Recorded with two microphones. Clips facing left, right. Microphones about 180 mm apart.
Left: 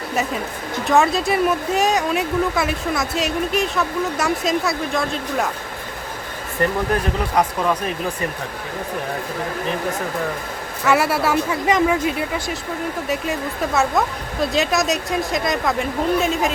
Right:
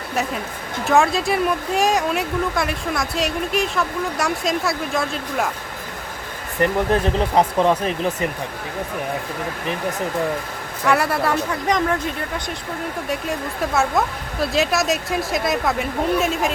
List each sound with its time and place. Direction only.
0.9 s a woman's voice: centre (ahead or behind)
6.6 s speech: 25° right (ahead or behind)
10.8 s a woman's voice: 5° left (ahead or behind)
13.1 s a woman's voice: centre (ahead or behind)